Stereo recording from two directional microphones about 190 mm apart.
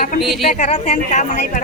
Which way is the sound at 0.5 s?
35° left (ahead or behind).